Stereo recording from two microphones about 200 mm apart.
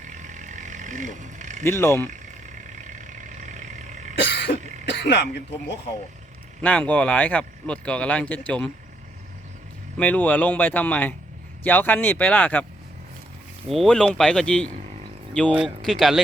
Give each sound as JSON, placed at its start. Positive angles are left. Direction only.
{"t": 0.1, "sound": "a sound", "side_deg": -40}
{"t": 1.6, "sound": "speech", "side_deg": 15}
{"t": 2.8, "sound": "vehicle", "side_deg": -40}
{"t": 4.2, "sound": "cough", "side_deg": 60}
{"t": 4.9, "sound": "speech", "side_deg": 55}
{"t": 6.6, "sound": "speech", "side_deg": 5}
{"t": 10.0, "sound": "speech", "side_deg": 10}
{"t": 13.7, "sound": "speech", "side_deg": 5}